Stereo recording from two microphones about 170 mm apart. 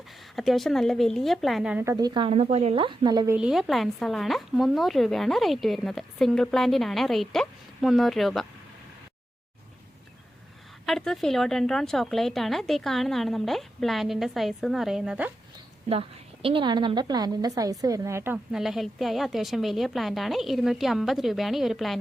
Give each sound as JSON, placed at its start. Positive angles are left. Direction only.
{"t": 0.3, "sound": "speech", "side_deg": 0}
{"t": 1.8, "sound": "a woman's voice", "side_deg": -20}
{"t": 3.3, "sound": "speech", "side_deg": -5}
{"t": 10.8, "sound": "speech", "side_deg": 5}
{"t": 15.9, "sound": "a woman's voice", "side_deg": -35}
{"t": 18.5, "sound": "speech", "side_deg": 0}